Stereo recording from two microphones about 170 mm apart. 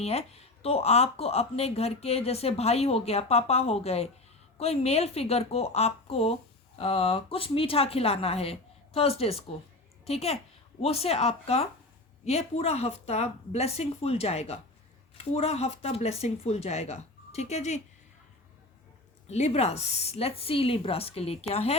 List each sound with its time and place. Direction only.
0.0 s speech: 40° left (ahead or behind)
19.3 s speech: 40° left (ahead or behind)